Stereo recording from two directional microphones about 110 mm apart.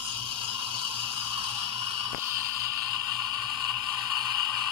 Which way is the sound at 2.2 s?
25° right (ahead or behind).